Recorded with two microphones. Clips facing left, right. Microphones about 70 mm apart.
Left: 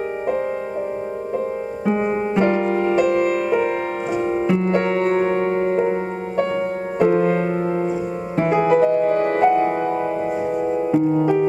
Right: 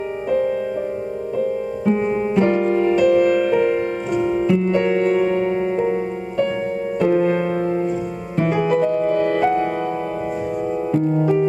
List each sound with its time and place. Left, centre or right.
1.9 s music: centre
4.2 s music: left
7.0 s music: centre
8.4 s music: left
9.4 s music: centre
10.7 s music: centre